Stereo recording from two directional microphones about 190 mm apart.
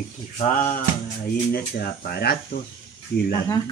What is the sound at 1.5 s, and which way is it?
Speech, 55° left (ahead or behind).